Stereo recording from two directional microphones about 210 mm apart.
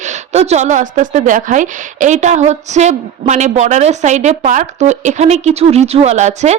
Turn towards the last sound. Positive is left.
turn(degrees=-30)  # may be behind; listen again after turning